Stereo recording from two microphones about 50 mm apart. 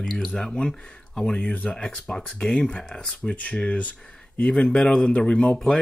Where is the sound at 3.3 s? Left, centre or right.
Left.